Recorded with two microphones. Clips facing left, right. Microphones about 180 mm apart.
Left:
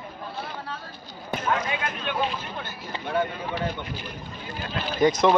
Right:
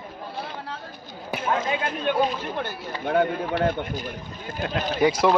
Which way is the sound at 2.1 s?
40° right (ahead or behind).